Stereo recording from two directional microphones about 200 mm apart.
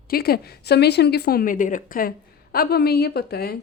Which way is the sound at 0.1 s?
50° left (ahead or behind).